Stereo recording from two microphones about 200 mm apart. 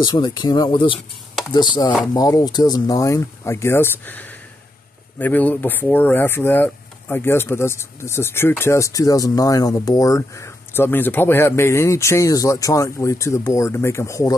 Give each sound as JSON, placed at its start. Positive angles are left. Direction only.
{"t": 0.0, "sound": "speech", "side_deg": 20}